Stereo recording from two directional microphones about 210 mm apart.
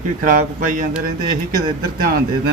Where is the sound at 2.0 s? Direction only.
45° right (ahead or behind).